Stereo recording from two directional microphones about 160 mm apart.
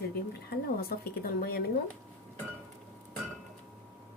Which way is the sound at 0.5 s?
70° left (ahead or behind).